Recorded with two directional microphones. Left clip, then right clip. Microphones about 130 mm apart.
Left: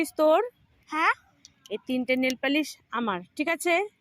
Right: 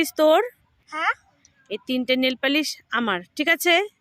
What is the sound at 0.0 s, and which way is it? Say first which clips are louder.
Speech: right 4 dB; 50° right (ahead or behind).